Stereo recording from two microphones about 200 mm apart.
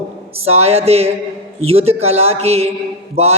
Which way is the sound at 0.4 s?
30° right (ahead or behind).